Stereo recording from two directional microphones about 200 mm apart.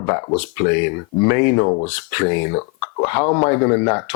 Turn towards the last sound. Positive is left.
turn(degrees=15)  # may be behind; listen again after turning